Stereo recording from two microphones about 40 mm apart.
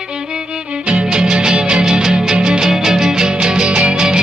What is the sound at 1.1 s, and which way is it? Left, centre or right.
Music, right.